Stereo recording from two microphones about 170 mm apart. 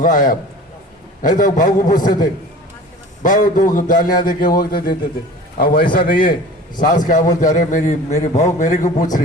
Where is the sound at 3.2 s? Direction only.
50° left (ahead or behind).